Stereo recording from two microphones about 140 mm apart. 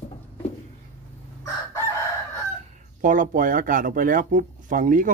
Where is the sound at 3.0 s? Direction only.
70° right (ahead or behind).